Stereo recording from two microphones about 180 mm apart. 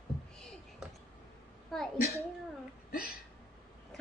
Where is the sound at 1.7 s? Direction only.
Centre (ahead or behind).